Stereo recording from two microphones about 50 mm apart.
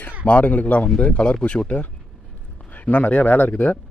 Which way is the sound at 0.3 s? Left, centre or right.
Left.